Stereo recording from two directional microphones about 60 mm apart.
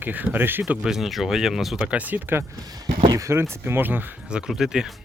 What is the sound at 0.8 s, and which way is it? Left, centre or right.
Speech, centre.